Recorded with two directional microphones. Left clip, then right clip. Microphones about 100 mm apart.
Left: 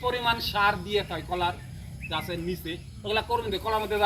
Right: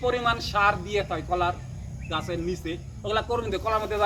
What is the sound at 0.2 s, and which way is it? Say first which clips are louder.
Speech: right 1 dB; 20° right (ahead or behind).